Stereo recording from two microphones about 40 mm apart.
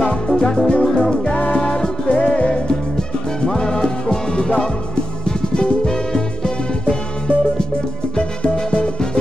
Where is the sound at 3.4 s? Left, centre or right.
Centre.